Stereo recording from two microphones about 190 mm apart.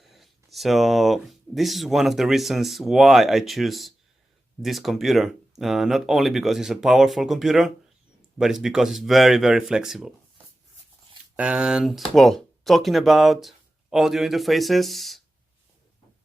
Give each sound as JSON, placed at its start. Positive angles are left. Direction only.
{"t": 0.0, "sound": "speech", "side_deg": 0}